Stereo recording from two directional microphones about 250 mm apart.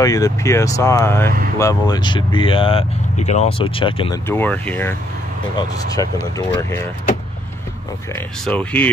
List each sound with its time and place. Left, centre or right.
0.0 s speech: centre
4.3 s speech: centre
5.9 s speech: centre
8.1 s speech: centre